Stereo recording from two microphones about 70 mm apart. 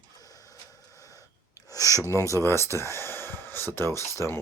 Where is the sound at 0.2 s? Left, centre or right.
Left.